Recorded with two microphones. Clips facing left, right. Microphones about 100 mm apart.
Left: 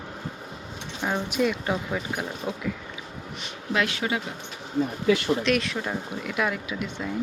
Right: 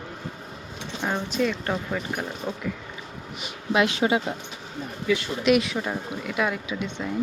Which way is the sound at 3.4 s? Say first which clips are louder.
Right 4 dB; 20° right (ahead or behind).